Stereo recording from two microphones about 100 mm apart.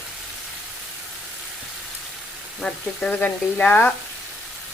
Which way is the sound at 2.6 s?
10° left (ahead or behind).